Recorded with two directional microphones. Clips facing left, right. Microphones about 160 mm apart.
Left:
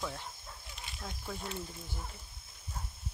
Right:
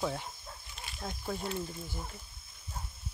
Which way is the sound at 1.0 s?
20° right (ahead or behind).